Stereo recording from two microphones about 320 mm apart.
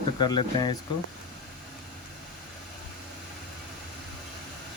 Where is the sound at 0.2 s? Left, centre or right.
Centre.